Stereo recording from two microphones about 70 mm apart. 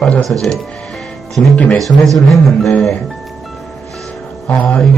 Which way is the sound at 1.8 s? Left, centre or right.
Centre.